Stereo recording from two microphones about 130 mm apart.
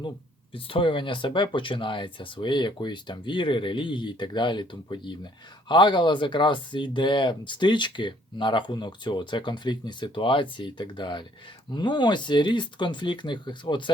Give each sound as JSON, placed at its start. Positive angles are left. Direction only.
{"t": 0.5, "sound": "speech", "side_deg": 40}